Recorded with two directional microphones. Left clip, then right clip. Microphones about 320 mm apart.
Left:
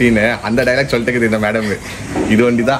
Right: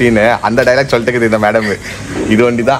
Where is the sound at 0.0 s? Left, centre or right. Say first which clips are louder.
Right 4 dB; centre.